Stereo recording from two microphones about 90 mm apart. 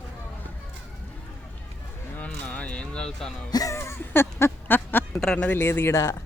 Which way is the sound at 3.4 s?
45° left (ahead or behind).